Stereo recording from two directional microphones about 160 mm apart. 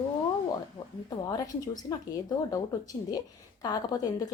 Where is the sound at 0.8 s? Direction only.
25° left (ahead or behind).